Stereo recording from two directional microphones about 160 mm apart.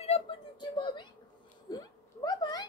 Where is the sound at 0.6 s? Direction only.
25° left (ahead or behind).